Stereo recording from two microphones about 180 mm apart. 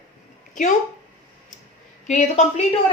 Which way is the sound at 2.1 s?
40° left (ahead or behind).